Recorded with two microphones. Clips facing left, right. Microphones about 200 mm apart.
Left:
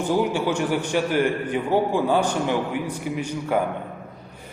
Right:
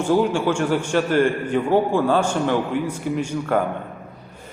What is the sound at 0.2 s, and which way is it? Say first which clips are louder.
A man's voice: right 3 dB; 15° left (ahead or behind).